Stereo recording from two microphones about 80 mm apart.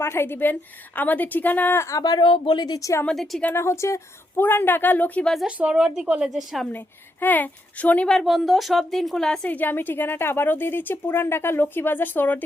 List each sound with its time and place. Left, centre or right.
0.0 s a woman's voice: left
1.8 s a woman's voice: left
3.1 s a woman's voice: centre
3.5 s speech: left
4.4 s a woman's voice: left
5.2 s a woman's voice: centre
5.5 s a woman's voice: centre
6.7 s a woman's voice: left
8.1 s a woman's voice: centre
9.5 s a woman's voice: left